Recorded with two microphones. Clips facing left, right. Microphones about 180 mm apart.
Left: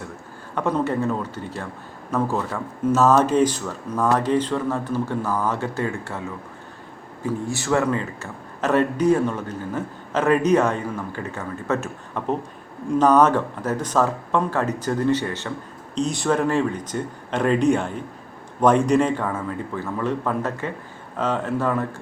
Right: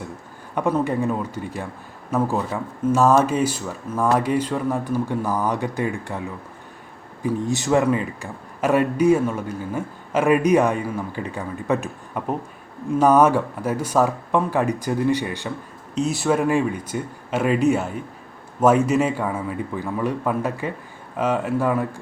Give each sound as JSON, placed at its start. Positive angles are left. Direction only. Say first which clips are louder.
{"t": 0.5, "sound": "a man's voice", "louder": "right 1 dB", "side_deg": -10}